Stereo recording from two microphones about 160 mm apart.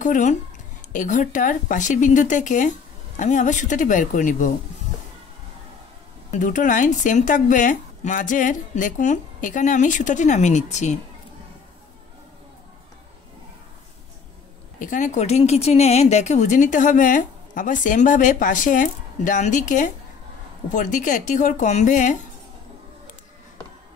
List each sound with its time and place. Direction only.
0.0 s a woman's voice: 50° left (ahead or behind)
6.3 s a woman's voice: 55° left (ahead or behind)
14.8 s a woman's voice: 55° left (ahead or behind)